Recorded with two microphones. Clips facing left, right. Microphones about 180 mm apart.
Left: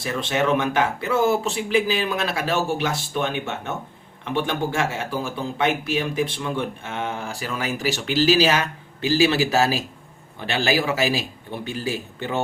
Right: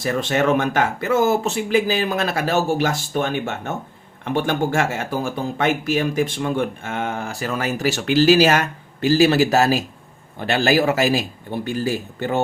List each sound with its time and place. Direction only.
0.0 s speech: 45° right (ahead or behind)